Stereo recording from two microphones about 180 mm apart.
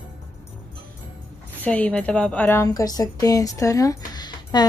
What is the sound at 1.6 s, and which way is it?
Speech, 5° left (ahead or behind).